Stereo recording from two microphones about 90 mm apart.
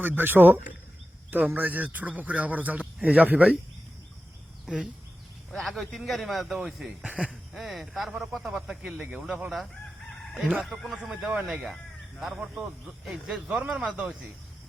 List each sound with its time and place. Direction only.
0.2 s a man's voice: 25° right (ahead or behind)
4.6 s speech: 5° right (ahead or behind)
10.1 s fowl: centre (ahead or behind)
10.4 s a man's voice: 5° right (ahead or behind)